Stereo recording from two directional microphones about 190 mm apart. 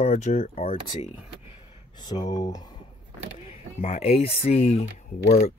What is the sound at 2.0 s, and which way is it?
Speech, 20° left (ahead or behind).